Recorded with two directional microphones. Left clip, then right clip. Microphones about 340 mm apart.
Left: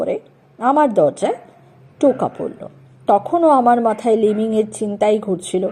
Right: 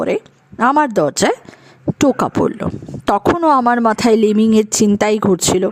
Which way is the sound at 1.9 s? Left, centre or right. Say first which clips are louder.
Right 1 dB; right.